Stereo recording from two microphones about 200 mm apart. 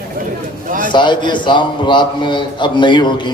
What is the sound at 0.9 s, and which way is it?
A man's voice, 25° left (ahead or behind).